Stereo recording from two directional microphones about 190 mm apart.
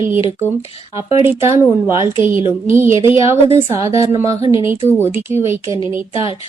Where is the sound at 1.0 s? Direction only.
15° right (ahead or behind).